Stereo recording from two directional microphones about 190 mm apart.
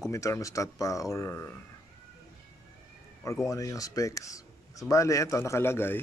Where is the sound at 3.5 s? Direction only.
15° left (ahead or behind).